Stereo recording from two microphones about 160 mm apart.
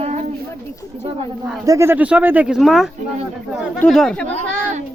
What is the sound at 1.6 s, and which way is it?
A woman's voice, 20° right (ahead or behind).